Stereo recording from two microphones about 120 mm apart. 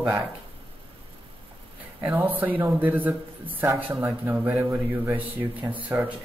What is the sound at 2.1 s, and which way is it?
Speech, 15° right (ahead or behind).